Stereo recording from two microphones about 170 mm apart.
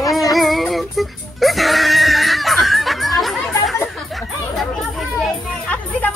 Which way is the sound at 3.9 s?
Centre (ahead or behind).